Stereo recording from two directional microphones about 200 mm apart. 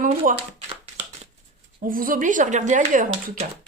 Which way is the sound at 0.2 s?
40° right (ahead or behind).